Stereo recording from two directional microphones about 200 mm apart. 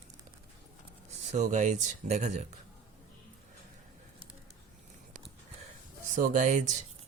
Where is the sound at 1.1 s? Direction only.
35° right (ahead or behind).